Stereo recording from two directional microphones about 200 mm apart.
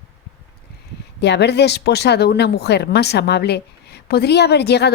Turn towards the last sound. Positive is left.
turn(degrees=55)  # may be behind; listen again after turning